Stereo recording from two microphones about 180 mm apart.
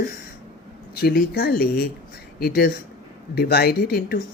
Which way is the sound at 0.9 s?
60° left (ahead or behind).